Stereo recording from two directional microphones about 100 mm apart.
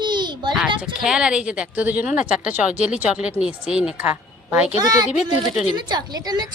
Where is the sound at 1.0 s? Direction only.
10° right (ahead or behind).